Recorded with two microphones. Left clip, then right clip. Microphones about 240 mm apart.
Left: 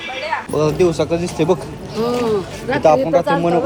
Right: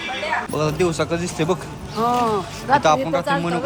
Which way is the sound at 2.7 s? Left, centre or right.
Centre.